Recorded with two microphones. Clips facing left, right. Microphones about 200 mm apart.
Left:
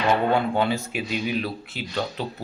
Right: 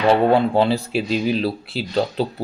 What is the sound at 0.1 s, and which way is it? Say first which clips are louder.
Speech: right 6 dB; 30° right (ahead or behind).